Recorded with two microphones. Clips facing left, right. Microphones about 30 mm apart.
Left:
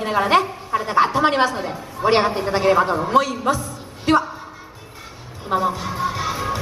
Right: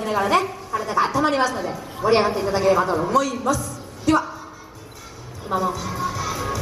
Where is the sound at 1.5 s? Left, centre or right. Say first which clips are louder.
Even; left.